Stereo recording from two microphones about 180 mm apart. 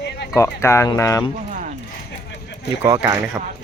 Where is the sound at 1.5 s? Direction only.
45° right (ahead or behind).